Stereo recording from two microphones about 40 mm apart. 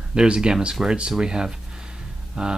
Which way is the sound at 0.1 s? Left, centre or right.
Right.